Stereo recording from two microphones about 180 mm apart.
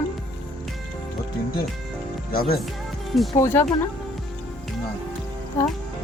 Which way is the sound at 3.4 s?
15° left (ahead or behind).